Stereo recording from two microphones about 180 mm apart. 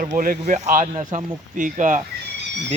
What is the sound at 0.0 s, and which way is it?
Speech, 50° right (ahead or behind).